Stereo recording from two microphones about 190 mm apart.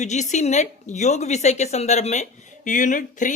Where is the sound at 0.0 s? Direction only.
40° left (ahead or behind).